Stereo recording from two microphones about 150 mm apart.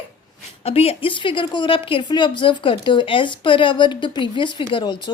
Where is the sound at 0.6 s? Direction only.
40° left (ahead or behind).